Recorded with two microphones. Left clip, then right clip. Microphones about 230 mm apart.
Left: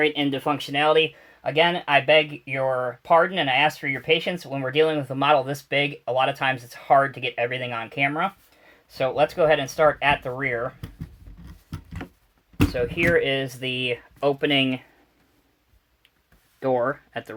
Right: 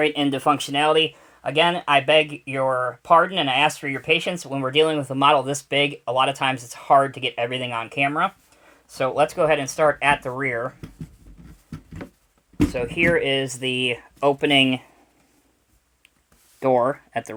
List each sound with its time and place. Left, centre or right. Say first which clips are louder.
0.0 s speech: right 2 dB; right
12.7 s speech: even; right
16.6 s speech: right 4 dB; right